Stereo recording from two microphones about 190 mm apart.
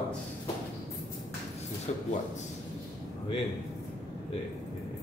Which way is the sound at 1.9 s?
35° left (ahead or behind).